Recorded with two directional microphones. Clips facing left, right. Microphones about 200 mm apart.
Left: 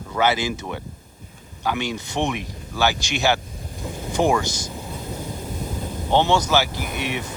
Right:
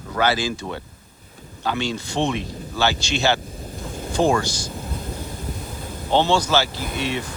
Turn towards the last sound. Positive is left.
turn(degrees=15)  # may be behind; listen again after turning